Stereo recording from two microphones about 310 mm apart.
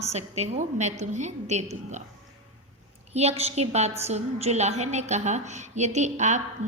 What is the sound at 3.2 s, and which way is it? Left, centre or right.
A woman's voice, centre.